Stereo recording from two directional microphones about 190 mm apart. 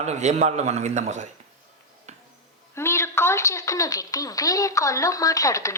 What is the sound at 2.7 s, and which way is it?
Speech, 15° left (ahead or behind).